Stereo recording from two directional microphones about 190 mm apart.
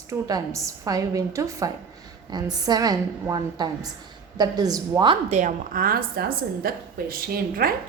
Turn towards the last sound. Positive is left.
turn(degrees=-50)  # may be behind; listen again after turning